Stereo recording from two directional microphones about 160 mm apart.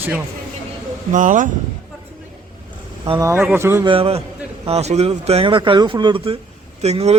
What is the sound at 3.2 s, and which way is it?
Speech, 15° right (ahead or behind).